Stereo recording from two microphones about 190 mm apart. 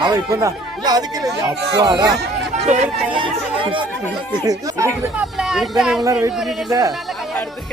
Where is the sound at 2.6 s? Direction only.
35° right (ahead or behind); by 4.9 s 20° right (ahead or behind).